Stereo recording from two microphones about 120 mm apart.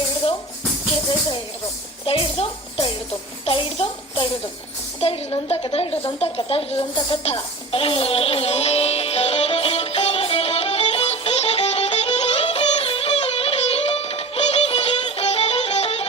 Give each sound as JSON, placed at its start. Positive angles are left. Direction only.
{"t": 2.0, "sound": "music", "side_deg": 50}
{"t": 3.4, "sound": "a child's voice", "side_deg": 50}
{"t": 7.7, "sound": "sitar", "side_deg": 50}